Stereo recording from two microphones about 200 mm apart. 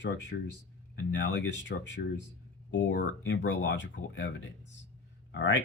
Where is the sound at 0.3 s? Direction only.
60° left (ahead or behind).